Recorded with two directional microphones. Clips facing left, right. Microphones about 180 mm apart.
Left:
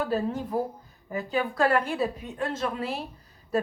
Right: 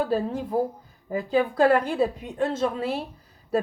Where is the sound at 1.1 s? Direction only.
30° right (ahead or behind).